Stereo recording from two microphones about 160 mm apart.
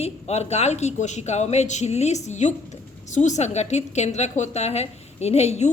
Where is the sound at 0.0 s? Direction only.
40° left (ahead or behind).